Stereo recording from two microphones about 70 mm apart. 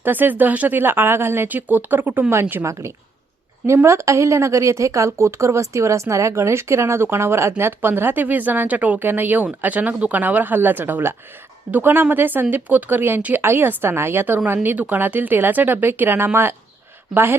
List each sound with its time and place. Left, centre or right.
0.0 s speech: right
2.6 s a woman's voice: right